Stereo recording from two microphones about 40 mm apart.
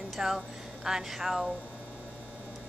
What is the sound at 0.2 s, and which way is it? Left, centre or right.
Music, centre.